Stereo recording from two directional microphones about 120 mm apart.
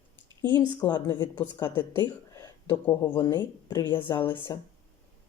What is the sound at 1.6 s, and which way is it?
Speech, 20° left (ahead or behind).